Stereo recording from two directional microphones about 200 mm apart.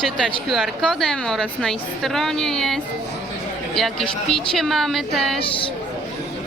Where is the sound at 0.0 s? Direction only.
5° left (ahead or behind).